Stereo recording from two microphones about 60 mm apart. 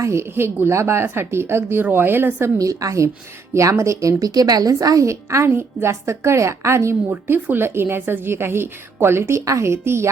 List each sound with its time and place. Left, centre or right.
0.0 s a woman's voice: right
2.6 s a woman's voice: right
4.2 s a woman's voice: right
7.4 s a woman's voice: right